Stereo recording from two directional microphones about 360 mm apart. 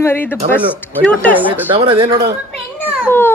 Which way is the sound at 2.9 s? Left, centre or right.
Centre.